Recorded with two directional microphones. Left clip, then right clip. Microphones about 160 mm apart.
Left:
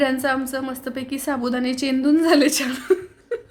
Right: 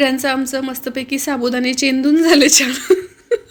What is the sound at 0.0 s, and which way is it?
A woman's voice, 15° right (ahead or behind).